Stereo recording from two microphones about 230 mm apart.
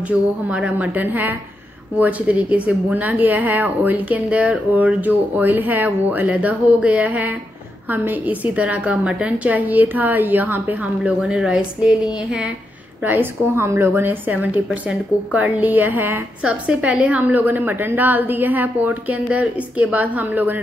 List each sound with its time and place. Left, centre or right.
0.5 s a woman's voice: centre